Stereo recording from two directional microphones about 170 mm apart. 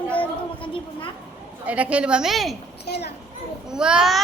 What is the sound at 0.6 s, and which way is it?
Speech, 30° left (ahead or behind).